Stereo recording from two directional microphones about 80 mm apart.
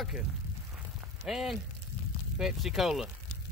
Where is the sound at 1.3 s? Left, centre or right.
Centre.